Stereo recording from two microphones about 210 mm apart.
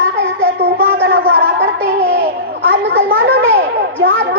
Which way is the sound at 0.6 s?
55° right (ahead or behind).